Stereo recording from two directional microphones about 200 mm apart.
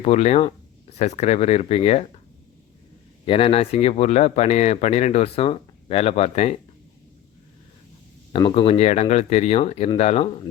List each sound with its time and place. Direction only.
0.0 s speech: 35° left (ahead or behind)
3.2 s speech: 30° left (ahead or behind)
8.3 s speech: 25° left (ahead or behind)